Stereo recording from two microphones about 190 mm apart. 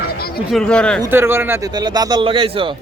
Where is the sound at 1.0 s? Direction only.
10° right (ahead or behind).